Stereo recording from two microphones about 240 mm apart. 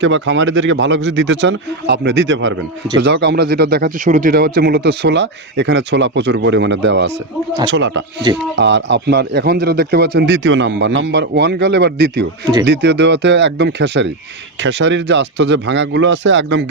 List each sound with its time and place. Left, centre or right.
0.0 s speech: right